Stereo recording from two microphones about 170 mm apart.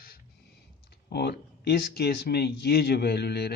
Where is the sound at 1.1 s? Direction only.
75° left (ahead or behind).